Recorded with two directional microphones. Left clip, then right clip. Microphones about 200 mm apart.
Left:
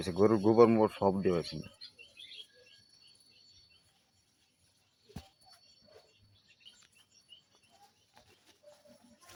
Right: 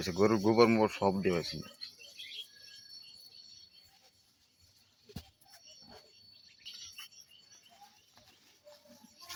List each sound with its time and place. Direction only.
0.0 s speech: 15° left (ahead or behind)